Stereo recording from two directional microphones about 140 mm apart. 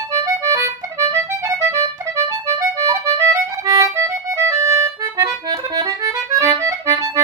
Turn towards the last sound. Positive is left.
turn(degrees=-20)  # may be behind; listen again after turning